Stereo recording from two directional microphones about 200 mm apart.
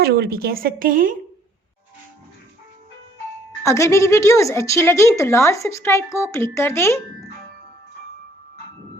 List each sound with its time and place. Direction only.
0.0 s a woman's voice: 50° right (ahead or behind)
3.6 s a woman's voice: 15° left (ahead or behind)